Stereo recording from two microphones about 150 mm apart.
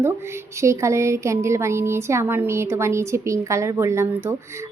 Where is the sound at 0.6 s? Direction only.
20° right (ahead or behind).